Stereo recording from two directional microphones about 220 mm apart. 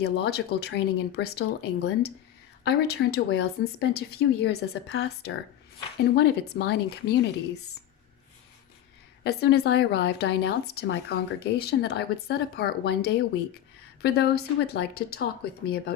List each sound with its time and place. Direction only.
0.0 s a woman's voice: 50° left (ahead or behind)
9.2 s a woman's voice: 45° left (ahead or behind)